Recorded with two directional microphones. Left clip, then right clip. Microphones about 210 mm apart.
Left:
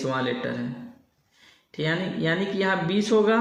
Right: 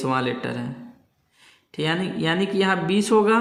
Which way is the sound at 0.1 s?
45° right (ahead or behind).